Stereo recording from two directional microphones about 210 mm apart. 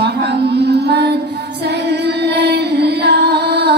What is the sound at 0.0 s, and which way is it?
Music, 50° right (ahead or behind).